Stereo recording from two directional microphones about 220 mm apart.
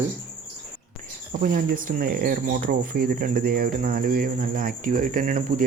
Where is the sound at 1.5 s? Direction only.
40° right (ahead or behind).